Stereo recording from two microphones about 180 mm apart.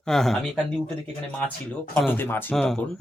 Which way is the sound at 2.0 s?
10° left (ahead or behind).